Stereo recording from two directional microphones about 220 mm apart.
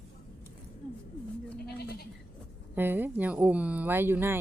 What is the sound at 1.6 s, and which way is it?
Bleat, 45° left (ahead or behind).